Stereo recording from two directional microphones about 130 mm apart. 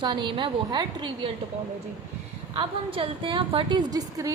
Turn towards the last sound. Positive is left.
turn(degrees=-30)  # may be behind; listen again after turning